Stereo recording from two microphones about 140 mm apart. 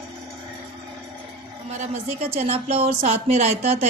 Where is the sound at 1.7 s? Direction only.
55° right (ahead or behind).